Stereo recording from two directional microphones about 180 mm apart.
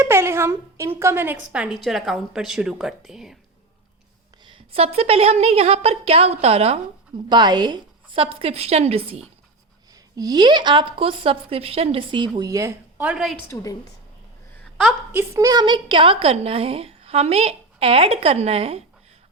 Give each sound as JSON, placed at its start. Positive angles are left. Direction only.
{"t": 0.0, "sound": "a woman's voice", "side_deg": -15}
{"t": 4.4, "sound": "a woman's voice", "side_deg": -30}
{"t": 7.3, "sound": "a woman's voice", "side_deg": -25}
{"t": 9.9, "sound": "a woman's voice", "side_deg": -20}
{"t": 13.5, "sound": "a woman's voice", "side_deg": 20}
{"t": 14.6, "sound": "a sound", "side_deg": 0}
{"t": 15.1, "sound": "a woman's voice", "side_deg": -15}